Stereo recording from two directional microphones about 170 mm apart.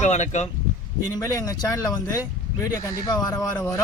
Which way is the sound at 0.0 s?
45° left (ahead or behind).